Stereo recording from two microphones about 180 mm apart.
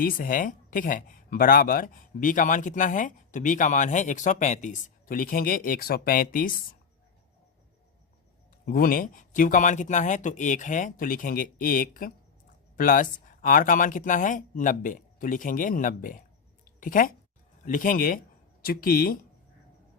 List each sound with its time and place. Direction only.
0.0 s speech: 50° left (ahead or behind)
8.6 s speech: 50° left (ahead or behind)
16.6 s a sound: 50° left (ahead or behind)
17.7 s speech: 50° left (ahead or behind)